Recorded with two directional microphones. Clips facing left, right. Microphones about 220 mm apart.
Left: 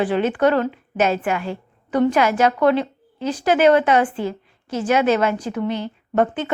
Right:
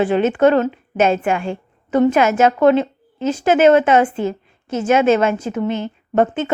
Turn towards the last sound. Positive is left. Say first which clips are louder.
# right 3 dB
turn(degrees=-25)  # may be behind; listen again after turning